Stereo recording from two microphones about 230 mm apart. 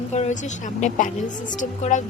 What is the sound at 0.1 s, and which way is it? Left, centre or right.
Speech, left.